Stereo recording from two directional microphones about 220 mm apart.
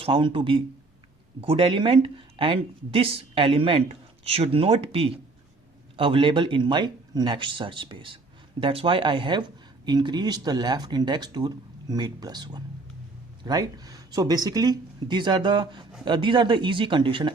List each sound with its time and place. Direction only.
0.0 s speech: 20° right (ahead or behind)